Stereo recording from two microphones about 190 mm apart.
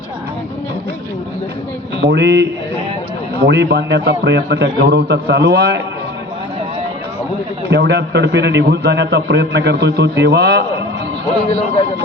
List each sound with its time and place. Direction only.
2.0 s a man's voice: 65° right (ahead or behind)
7.7 s a man's voice: 65° right (ahead or behind)